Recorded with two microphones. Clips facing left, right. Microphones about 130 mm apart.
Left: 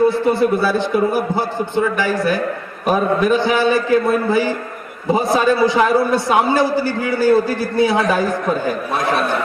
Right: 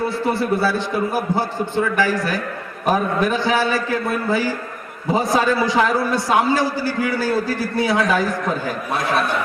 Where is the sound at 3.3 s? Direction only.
20° left (ahead or behind).